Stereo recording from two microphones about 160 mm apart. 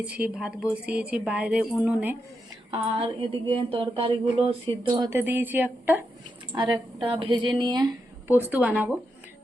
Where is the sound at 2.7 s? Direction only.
35° right (ahead or behind).